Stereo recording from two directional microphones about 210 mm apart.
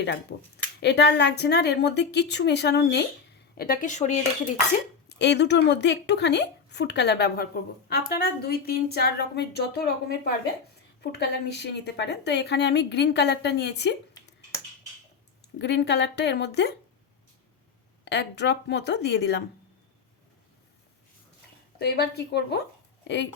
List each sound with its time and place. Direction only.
0.0 s a woman's voice: 55° left (ahead or behind)
3.6 s speech: 40° left (ahead or behind)
5.0 s a woman's voice: 55° left (ahead or behind)
15.5 s speech: 55° left (ahead or behind)
18.0 s a woman's voice: 55° left (ahead or behind)
21.8 s a woman's voice: 50° left (ahead or behind)